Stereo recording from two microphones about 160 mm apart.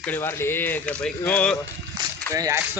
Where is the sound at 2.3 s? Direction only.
20° right (ahead or behind).